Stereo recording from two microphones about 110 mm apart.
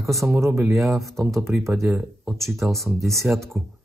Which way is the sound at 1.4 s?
25° right (ahead or behind).